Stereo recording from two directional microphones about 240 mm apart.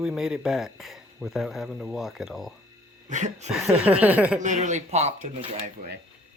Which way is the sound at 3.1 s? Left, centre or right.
Right.